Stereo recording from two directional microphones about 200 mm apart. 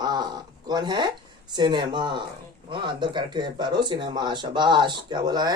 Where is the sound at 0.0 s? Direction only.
20° right (ahead or behind).